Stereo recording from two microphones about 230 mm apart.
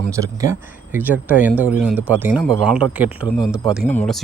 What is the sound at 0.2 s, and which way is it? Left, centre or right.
Speech, centre.